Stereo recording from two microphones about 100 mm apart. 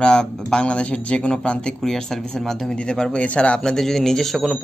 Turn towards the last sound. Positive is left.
turn(degrees=5)  # may be behind; listen again after turning